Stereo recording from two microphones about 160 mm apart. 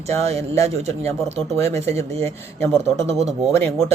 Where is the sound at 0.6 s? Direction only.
45° right (ahead or behind).